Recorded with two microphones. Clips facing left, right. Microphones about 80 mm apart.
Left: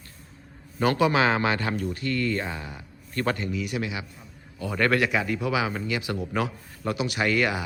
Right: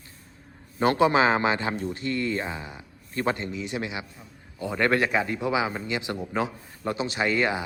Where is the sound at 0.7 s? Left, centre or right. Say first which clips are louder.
Right 1 dB; right.